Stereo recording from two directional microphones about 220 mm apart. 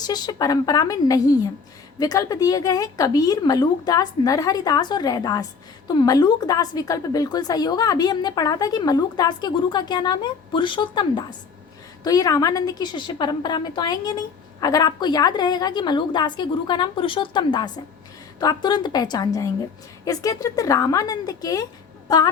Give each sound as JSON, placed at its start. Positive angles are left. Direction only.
{"t": 0.0, "sound": "a woman's voice", "side_deg": 20}